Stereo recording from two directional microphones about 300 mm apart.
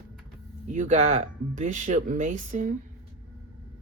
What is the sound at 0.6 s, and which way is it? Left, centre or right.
Speech, right.